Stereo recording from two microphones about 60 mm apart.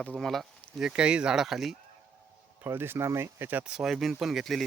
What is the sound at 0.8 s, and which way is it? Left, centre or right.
Speech, centre.